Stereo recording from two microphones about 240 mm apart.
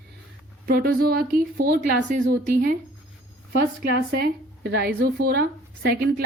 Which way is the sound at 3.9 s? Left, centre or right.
Right.